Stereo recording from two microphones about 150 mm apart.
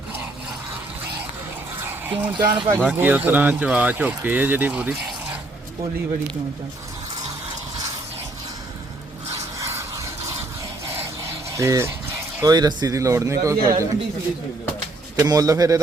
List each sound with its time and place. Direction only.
1.8 s a sound: 15° right (ahead or behind)
2.4 s speech: 30° right (ahead or behind)
2.8 s speech: 10° right (ahead or behind)
9.6 s a sound: 20° right (ahead or behind)
11.5 s speech: 20° right (ahead or behind)
15.2 s speech: 25° right (ahead or behind)